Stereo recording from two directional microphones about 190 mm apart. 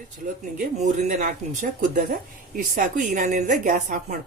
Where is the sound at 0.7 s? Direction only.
40° right (ahead or behind).